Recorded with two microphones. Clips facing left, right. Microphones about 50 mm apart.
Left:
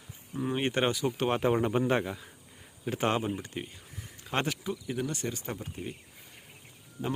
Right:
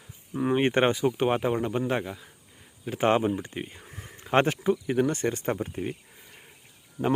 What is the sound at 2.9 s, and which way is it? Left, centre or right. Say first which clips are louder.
Speech: right 6 dB; centre.